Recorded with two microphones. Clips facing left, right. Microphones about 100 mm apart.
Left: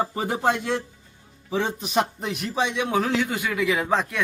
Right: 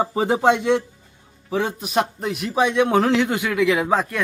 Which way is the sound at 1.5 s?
5° right (ahead or behind).